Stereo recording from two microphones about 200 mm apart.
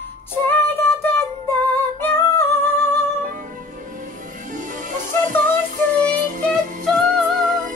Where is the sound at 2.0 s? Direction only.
10° left (ahead or behind).